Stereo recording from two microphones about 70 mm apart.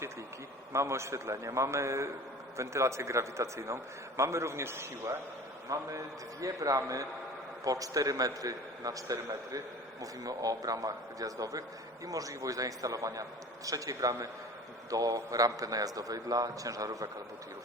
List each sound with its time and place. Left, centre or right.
0.7 s a man's voice: right
5.6 s a man's voice: right